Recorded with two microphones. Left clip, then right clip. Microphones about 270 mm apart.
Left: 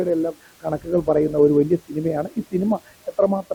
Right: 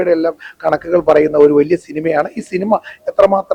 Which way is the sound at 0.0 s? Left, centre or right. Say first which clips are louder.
Right 8 dB; centre.